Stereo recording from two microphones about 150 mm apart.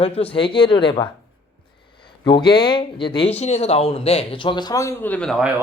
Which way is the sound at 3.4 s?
45° left (ahead or behind).